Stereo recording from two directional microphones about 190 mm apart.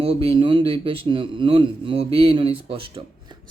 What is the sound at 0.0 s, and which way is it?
Speech, 30° right (ahead or behind).